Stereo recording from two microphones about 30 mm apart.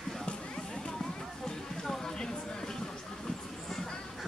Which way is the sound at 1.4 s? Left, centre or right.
Centre.